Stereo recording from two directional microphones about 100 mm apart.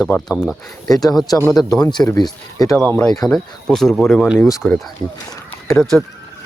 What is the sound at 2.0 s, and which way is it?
Speech, 25° left (ahead or behind).